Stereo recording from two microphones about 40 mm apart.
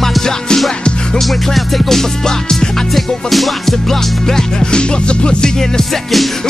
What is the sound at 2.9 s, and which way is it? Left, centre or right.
Music, centre.